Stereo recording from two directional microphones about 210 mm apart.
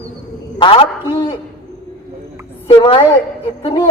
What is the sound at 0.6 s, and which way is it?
Speech, 25° left (ahead or behind).